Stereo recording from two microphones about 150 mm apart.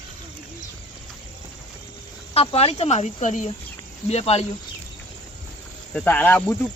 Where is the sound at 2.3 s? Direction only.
40° left (ahead or behind).